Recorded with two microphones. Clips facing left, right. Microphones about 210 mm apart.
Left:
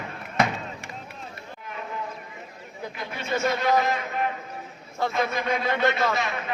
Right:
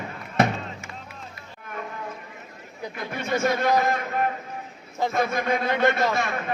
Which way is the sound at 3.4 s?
50° right (ahead or behind).